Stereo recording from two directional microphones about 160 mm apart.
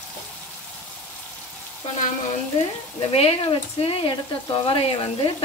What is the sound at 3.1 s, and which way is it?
Speech, 35° left (ahead or behind).